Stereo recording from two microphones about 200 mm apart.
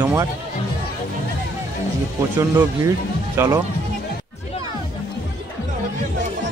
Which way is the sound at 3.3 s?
15° right (ahead or behind).